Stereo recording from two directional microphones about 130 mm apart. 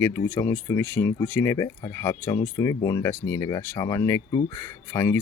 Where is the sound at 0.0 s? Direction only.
20° left (ahead or behind).